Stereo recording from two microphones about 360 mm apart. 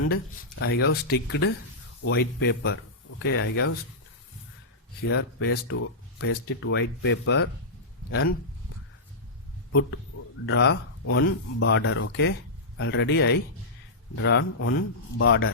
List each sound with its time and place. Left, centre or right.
0.6 s speech: left
5.0 s speech: left
10.4 s speech: left